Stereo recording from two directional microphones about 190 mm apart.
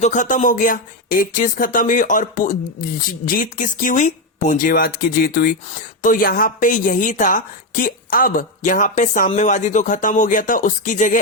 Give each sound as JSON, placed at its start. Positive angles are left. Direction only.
{"t": 0.0, "sound": "a woman's voice", "side_deg": 40}